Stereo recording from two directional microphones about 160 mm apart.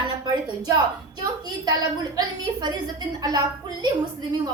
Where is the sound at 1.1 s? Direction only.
25° right (ahead or behind).